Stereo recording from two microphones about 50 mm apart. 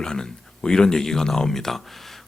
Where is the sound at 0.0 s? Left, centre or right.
Centre.